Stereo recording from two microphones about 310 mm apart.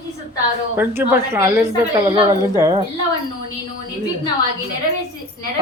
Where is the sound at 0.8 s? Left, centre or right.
Centre.